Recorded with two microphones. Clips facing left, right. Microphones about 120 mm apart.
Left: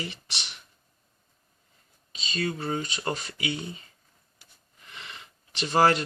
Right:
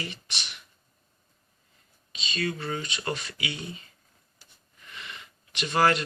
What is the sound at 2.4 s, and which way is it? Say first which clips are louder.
Speech: left 2 dB; 25° left (ahead or behind).